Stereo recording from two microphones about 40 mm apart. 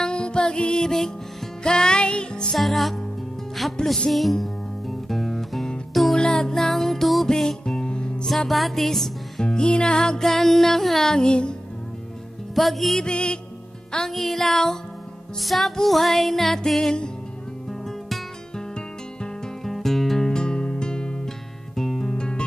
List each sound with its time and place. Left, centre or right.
0.0 s music: left
2.5 s music: centre
3.8 s music: centre
4.1 s music: centre
6.1 s music: centre
7.2 s music: centre
8.3 s music: centre; by 11.5 s left
12.5 s music: centre
13.0 s music: left
14.1 s music: centre
19.6 s music: centre
20.3 s music: left
21.7 s guitar: centre
22.1 s music: left